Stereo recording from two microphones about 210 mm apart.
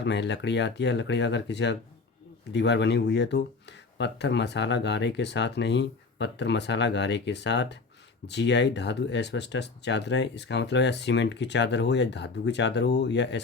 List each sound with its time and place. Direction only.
0.0 s speech: 55° left (ahead or behind)